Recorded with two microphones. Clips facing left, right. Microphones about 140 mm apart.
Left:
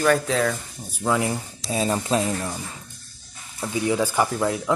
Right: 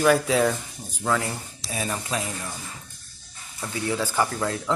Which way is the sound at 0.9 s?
15° left (ahead or behind).